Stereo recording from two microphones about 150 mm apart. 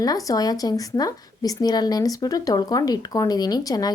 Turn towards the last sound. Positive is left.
turn(degrees=25)  # may be behind; listen again after turning